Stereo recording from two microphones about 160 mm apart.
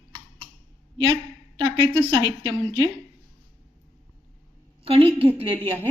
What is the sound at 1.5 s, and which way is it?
Speech, 30° right (ahead or behind).